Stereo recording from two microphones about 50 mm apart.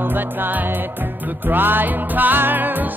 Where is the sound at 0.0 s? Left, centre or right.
Right.